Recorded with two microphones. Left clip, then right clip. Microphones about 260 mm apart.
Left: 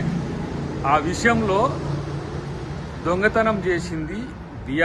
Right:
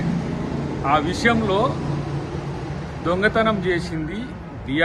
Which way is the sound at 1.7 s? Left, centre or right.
Right.